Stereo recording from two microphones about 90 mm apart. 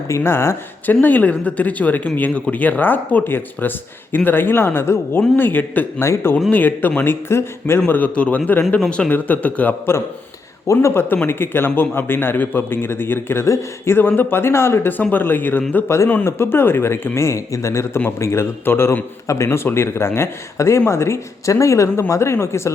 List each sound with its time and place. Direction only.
0.2 s a man's voice: 25° left (ahead or behind)